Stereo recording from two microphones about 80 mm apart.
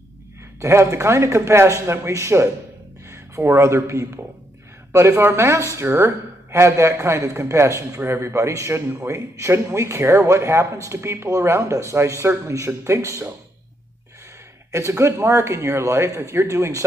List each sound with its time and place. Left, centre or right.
0.6 s a man's voice: right
14.7 s a man's voice: right